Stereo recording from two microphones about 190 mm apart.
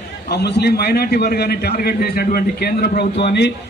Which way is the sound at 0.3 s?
60° left (ahead or behind).